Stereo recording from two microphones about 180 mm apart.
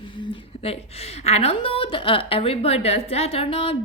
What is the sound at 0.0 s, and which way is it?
A woman's voice, 25° left (ahead or behind).